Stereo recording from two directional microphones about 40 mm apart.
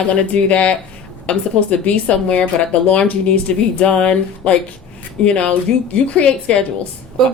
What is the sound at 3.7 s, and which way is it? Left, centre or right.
A woman's voice, left.